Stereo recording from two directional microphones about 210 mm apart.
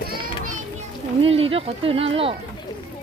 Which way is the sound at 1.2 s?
25° right (ahead or behind).